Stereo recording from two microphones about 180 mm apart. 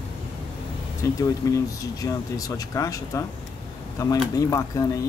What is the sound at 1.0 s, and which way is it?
Speech, 15° left (ahead or behind).